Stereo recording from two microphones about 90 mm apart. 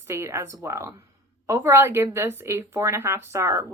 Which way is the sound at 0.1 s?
30° right (ahead or behind).